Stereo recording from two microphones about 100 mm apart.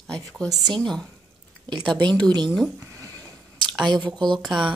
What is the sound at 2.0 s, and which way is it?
Speech, 45° right (ahead or behind).